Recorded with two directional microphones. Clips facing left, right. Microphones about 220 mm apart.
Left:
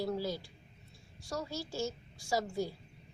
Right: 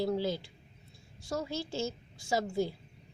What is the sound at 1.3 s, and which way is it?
Speech, 20° right (ahead or behind).